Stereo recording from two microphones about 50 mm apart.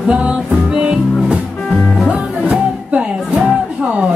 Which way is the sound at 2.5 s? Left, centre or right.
Right.